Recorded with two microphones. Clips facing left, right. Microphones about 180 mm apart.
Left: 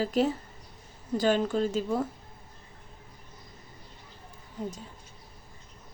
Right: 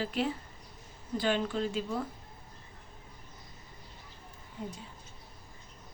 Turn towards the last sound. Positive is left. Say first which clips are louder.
# left 5 dB
turn(degrees=40)  # may be behind; listen again after turning